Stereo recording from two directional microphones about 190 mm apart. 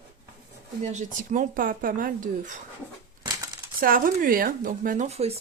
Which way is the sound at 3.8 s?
45° right (ahead or behind).